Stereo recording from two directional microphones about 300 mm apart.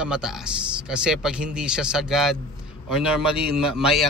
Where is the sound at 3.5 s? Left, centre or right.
Centre.